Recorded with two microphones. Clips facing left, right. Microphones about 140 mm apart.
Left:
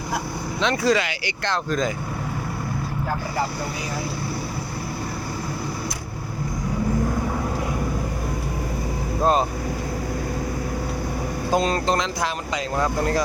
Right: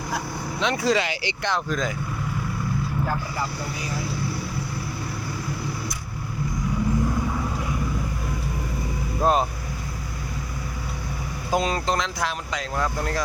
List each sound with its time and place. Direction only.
0.6 s speech: 10° right (ahead or behind)
0.9 s speech: 25° right (ahead or behind)
1.5 s speech: 5° right (ahead or behind)
9.2 s speech: 5° right (ahead or behind)
11.5 s speech: 5° right (ahead or behind)